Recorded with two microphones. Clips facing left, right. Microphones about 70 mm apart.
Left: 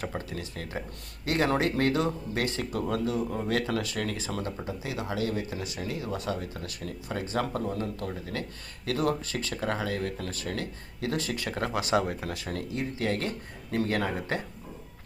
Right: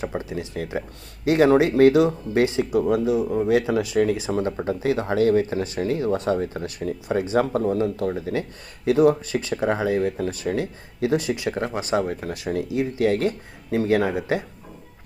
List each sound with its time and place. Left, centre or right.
0.0 s speech: centre
4.3 s speech: right
4.9 s speech: right
12.7 s speech: centre